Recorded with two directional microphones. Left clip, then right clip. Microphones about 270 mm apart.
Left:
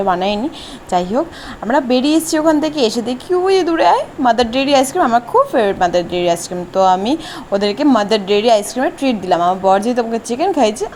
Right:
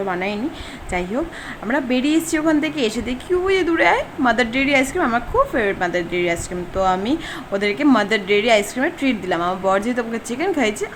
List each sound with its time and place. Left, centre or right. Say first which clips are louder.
0.0 s a woman's voice: left 7 dB; centre